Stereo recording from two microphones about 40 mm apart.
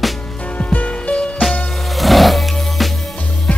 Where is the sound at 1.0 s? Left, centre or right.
Left.